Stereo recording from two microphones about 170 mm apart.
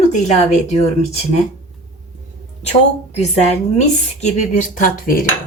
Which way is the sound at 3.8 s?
45° left (ahead or behind).